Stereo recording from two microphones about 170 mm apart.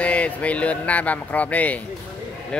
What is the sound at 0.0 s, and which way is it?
Speech, 10° left (ahead or behind).